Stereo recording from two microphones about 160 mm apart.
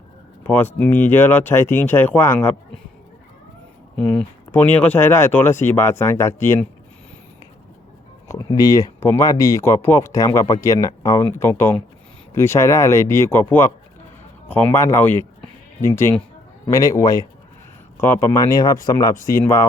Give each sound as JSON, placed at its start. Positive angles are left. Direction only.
{"t": 0.4, "sound": "speech", "side_deg": 15}
{"t": 3.9, "sound": "speech", "side_deg": 5}
{"t": 8.3, "sound": "speech", "side_deg": 25}